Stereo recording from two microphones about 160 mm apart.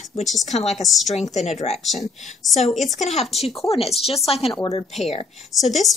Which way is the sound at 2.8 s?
45° left (ahead or behind).